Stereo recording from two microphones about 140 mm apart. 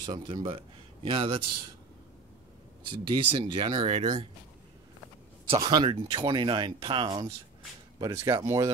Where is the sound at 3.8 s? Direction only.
50° right (ahead or behind).